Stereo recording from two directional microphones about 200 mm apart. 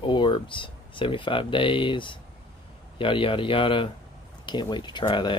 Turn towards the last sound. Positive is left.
turn(degrees=25)  # may be behind; listen again after turning